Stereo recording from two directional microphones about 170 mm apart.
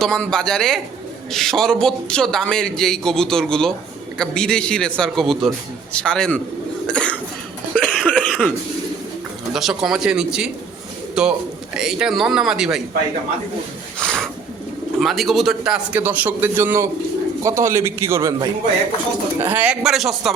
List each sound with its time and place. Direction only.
0.0 s a man's voice: 5° left (ahead or behind)
6.8 s cough: 5° left (ahead or behind)
7.7 s a sound: 5° left (ahead or behind)
9.5 s a man's voice: centre (ahead or behind)
14.0 s bird: 5° left (ahead or behind)
14.9 s a man's voice: centre (ahead or behind); by 18.3 s 15° right (ahead or behind)
19.4 s a man's voice: 10° right (ahead or behind)